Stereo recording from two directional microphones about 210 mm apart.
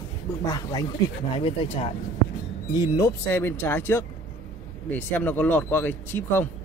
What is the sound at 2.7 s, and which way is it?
Speech, 15° left (ahead or behind).